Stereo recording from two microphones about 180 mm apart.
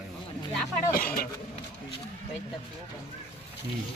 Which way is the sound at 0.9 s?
55° left (ahead or behind).